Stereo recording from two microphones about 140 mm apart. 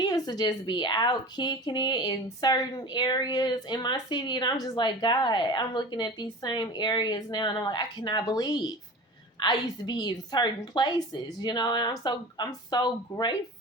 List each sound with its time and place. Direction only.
0.0 s speech: 30° left (ahead or behind)